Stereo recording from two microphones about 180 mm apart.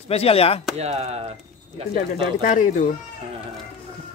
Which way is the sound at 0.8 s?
35° right (ahead or behind).